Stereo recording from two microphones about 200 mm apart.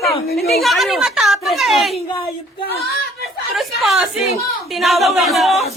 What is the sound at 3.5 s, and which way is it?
Speech, centre (ahead or behind).